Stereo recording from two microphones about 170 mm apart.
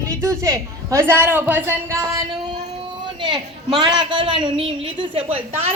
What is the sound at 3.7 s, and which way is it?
A woman's voice, 25° right (ahead or behind).